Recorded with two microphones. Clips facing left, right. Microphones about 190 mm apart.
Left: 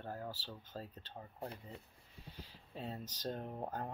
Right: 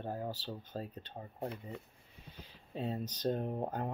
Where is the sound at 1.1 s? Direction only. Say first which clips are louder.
Right 4 dB; 25° right (ahead or behind).